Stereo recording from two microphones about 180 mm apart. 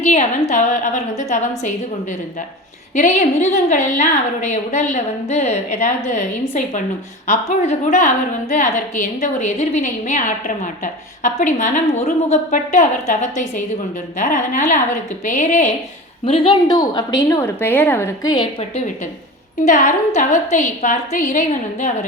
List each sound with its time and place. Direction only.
0.1 s a woman's voice: 40° left (ahead or behind)
2.9 s a woman's voice: 40° left (ahead or behind)
16.2 s a woman's voice: 30° left (ahead or behind)
19.6 s a woman's voice: 45° left (ahead or behind)